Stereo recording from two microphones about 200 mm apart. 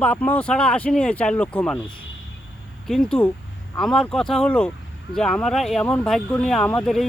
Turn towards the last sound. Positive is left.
turn(degrees=5)  # may be behind; listen again after turning